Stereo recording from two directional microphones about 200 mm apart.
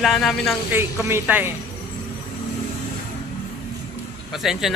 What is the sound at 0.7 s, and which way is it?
Speech, 10° right (ahead or behind).